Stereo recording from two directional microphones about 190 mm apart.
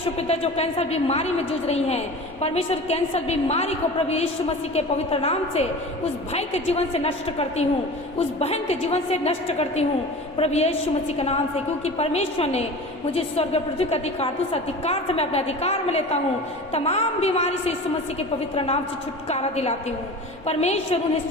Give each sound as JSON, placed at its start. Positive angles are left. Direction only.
{"t": 0.2, "sound": "a woman's voice", "side_deg": 30}
{"t": 11.9, "sound": "a woman's voice", "side_deg": 35}